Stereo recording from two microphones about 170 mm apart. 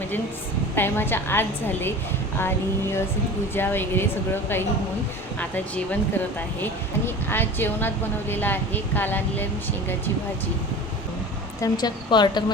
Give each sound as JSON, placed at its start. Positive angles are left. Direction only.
{"t": 0.8, "sound": "a woman's voice", "side_deg": 10}
{"t": 3.5, "sound": "a woman's voice", "side_deg": 10}
{"t": 11.6, "sound": "a woman's voice", "side_deg": 25}